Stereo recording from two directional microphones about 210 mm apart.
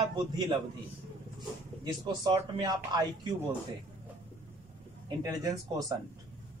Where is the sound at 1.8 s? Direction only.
20° right (ahead or behind).